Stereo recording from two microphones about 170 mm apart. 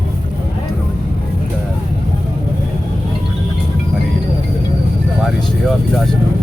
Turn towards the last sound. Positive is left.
turn(degrees=0)  # may be behind; listen again after turning